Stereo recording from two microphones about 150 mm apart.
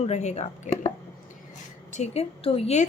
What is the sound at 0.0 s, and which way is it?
A woman's voice, 50° left (ahead or behind).